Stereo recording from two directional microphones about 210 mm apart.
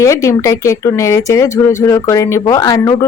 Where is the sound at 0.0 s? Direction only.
15° left (ahead or behind).